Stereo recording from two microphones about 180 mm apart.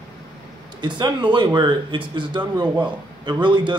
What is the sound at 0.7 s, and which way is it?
A man's voice, 25° right (ahead or behind).